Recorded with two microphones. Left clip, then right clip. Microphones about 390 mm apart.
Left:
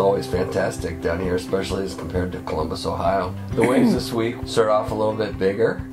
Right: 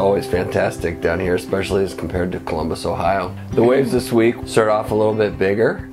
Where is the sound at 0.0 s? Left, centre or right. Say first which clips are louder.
Right 3 dB; right.